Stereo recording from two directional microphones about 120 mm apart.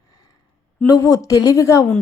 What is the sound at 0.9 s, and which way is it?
Speech, 30° left (ahead or behind).